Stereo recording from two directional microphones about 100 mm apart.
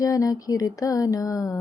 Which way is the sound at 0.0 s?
35° left (ahead or behind).